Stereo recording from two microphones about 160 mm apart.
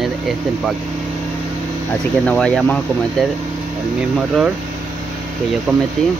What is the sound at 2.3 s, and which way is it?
Speech, 5° left (ahead or behind).